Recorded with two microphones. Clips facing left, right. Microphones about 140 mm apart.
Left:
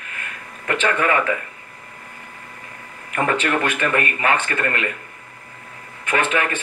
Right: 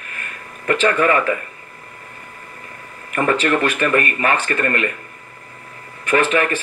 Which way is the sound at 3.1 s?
20° left (ahead or behind).